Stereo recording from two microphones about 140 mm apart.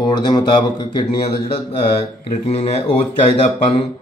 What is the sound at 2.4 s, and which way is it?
Speech, 50° left (ahead or behind).